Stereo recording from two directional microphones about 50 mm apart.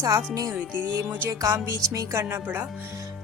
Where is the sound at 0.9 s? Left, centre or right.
Right.